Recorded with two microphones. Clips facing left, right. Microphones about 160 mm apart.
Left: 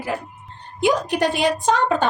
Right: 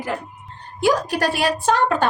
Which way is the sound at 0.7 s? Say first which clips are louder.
Even; 20° left (ahead or behind).